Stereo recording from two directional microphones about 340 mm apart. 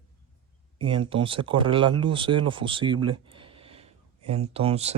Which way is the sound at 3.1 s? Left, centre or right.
Centre.